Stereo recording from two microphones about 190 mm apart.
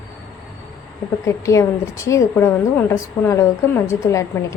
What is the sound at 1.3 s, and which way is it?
A woman's voice, 15° left (ahead or behind).